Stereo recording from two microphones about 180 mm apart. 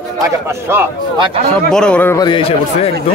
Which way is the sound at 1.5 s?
5° left (ahead or behind).